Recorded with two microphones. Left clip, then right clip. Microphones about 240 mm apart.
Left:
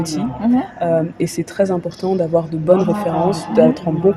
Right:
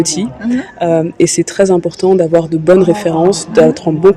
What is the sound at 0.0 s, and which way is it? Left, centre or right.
Speech, right.